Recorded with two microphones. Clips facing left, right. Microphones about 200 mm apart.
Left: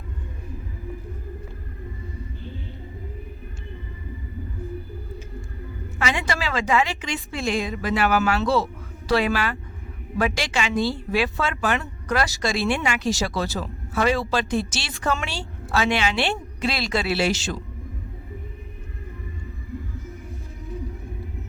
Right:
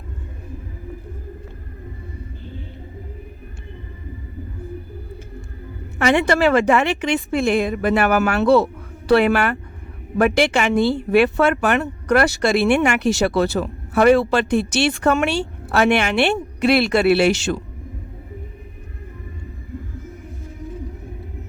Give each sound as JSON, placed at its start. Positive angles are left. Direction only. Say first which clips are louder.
{"t": 6.0, "sound": "speech", "louder": "right 10 dB", "side_deg": -55}